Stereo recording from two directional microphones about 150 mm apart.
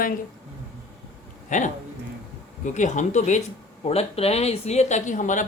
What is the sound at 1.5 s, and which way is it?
Speech, 55° left (ahead or behind).